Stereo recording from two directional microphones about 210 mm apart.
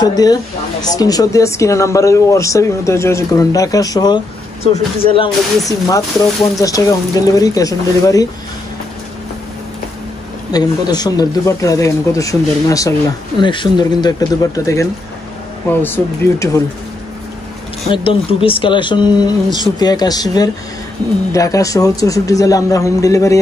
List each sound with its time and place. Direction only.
0.0 s speech: 20° left (ahead or behind)
5.7 s speech: 15° left (ahead or behind)
10.5 s speech: 20° left (ahead or behind)
17.9 s speech: 25° left (ahead or behind)